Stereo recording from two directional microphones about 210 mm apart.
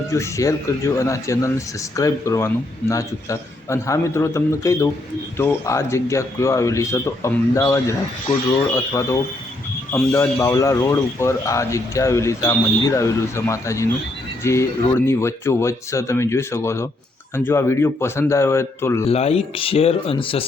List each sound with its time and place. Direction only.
0.1 s speech: 15° left (ahead or behind)
19.0 s speech: 30° left (ahead or behind)